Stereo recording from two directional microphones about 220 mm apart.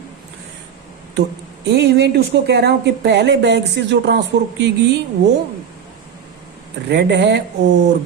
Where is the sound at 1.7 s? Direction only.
50° right (ahead or behind).